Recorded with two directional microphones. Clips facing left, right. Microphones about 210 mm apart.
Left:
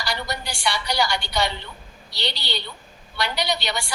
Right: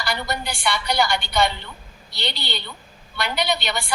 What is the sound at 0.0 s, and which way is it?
A woman's voice, 55° right (ahead or behind).